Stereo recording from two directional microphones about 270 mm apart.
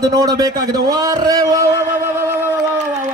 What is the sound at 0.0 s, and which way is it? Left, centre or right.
A man's voice, centre.